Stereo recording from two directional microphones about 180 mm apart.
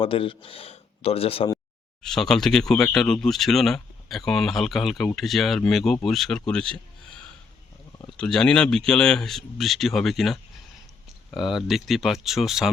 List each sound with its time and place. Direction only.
0.0 s speech: 30° left (ahead or behind)
2.0 s speech: 5° left (ahead or behind)
8.1 s speech: 5° left (ahead or behind)